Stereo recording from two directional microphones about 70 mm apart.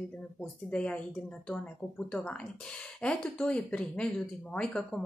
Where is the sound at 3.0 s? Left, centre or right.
Centre.